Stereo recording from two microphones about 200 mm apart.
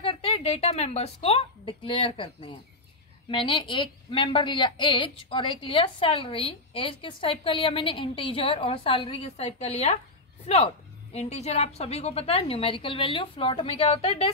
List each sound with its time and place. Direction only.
0.0 s a woman's voice: 30° left (ahead or behind)